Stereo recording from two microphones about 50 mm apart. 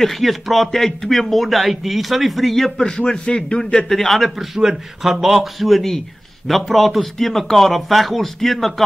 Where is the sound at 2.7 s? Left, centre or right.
Centre.